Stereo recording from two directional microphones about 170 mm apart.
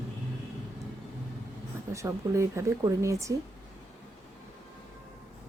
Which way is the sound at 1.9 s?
15° right (ahead or behind).